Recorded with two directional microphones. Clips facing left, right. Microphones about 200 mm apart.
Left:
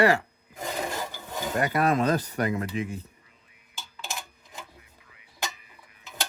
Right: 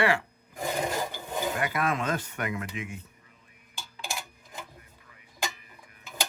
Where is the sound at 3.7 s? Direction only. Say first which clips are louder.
Even; 10° right (ahead or behind).